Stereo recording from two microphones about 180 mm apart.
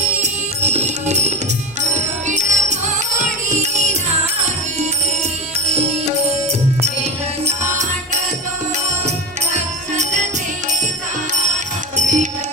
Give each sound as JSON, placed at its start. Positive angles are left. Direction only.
{"t": 0.2, "sound": "music", "side_deg": -40}
{"t": 5.5, "sound": "music", "side_deg": -35}
{"t": 11.9, "sound": "music", "side_deg": -45}